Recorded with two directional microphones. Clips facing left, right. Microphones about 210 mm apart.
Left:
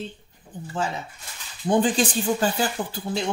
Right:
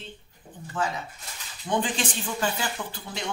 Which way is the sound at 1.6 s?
40° left (ahead or behind).